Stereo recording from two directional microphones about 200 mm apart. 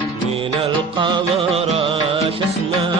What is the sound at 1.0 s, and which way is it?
Music, 25° right (ahead or behind).